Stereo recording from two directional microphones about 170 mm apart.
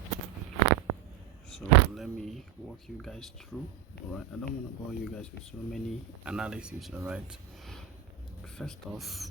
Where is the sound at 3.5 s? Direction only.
Centre (ahead or behind).